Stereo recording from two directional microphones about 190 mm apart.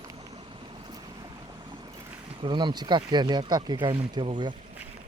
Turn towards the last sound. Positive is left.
turn(degrees=-25)  # may be behind; listen again after turning